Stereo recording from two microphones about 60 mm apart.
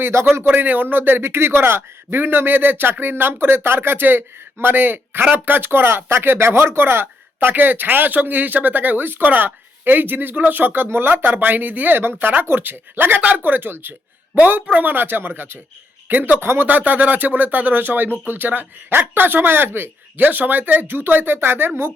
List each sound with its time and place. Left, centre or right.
0.0 s speech: right
0.4 s speech: right
16.4 s speech: right
16.6 s speech: right